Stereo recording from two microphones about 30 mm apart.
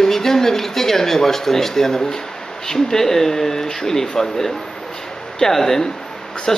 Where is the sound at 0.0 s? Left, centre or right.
Centre.